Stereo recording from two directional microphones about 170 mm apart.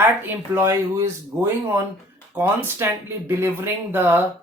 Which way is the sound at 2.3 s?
15° right (ahead or behind).